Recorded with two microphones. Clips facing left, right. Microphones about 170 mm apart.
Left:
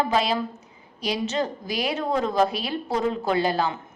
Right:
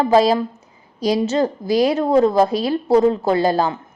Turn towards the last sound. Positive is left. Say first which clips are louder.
# right 6 dB
turn(degrees=-40)  # may be behind; listen again after turning